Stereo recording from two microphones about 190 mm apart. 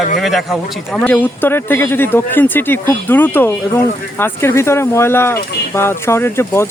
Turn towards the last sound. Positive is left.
turn(degrees=15)  # may be behind; listen again after turning